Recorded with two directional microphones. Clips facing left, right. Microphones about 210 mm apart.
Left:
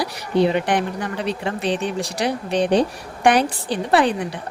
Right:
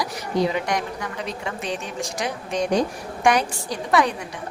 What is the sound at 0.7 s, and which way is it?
A woman's voice, 30° left (ahead or behind).